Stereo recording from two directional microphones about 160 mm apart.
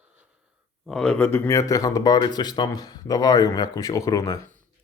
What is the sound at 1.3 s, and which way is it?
Speech, 20° left (ahead or behind).